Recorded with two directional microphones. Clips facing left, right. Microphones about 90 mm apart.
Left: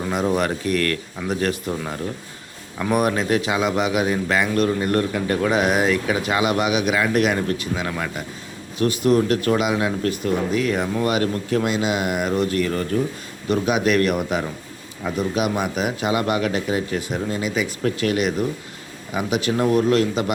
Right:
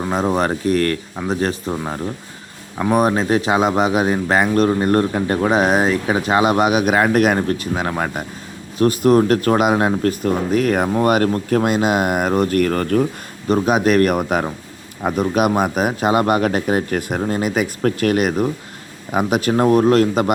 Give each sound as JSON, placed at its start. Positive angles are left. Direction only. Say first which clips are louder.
{"t": 0.0, "sound": "a man's voice", "louder": "right 3 dB", "side_deg": -30}
{"t": 13.5, "sound": "a man's voice", "louder": "right 4 dB", "side_deg": -40}